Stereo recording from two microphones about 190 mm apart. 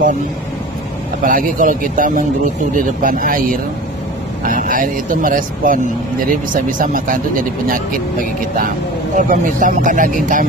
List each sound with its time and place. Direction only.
1.2 s speech: 45° right (ahead or behind)